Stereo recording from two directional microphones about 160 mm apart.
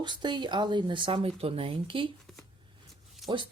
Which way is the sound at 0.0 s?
30° right (ahead or behind).